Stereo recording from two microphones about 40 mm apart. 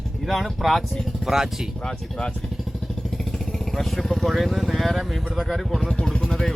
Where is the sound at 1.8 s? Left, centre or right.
Centre.